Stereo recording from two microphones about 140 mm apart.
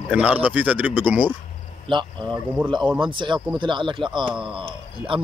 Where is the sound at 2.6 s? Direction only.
35° right (ahead or behind).